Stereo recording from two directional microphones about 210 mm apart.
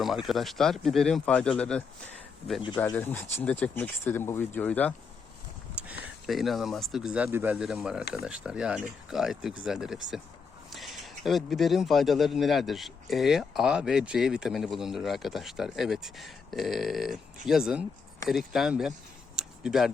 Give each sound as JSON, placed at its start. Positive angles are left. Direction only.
{"t": 0.0, "sound": "a man's voice", "side_deg": 0}
{"t": 2.6, "sound": "speech", "side_deg": 20}
{"t": 5.7, "sound": "a man's voice", "side_deg": -5}
{"t": 19.4, "sound": "a sound", "side_deg": 0}